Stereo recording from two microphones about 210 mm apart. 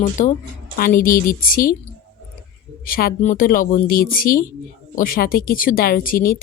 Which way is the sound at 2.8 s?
45° left (ahead or behind).